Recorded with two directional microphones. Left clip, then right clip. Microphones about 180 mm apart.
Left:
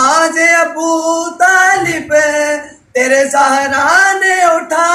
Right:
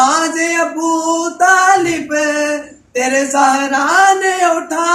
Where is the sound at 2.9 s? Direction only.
25° right (ahead or behind).